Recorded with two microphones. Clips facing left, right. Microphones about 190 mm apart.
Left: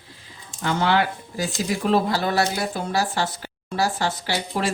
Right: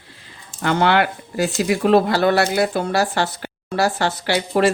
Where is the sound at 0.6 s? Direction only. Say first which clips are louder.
Right 4 dB; 65° right (ahead or behind).